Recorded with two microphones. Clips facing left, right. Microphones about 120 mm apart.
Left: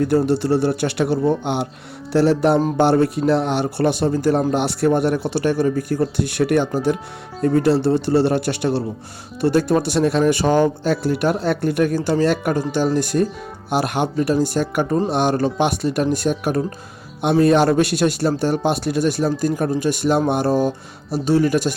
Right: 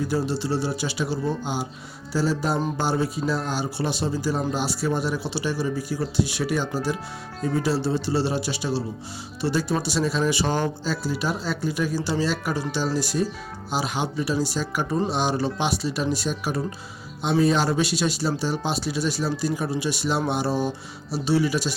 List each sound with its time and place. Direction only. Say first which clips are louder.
0.3 s a man's voice: left 8 dB; 55° left (ahead or behind)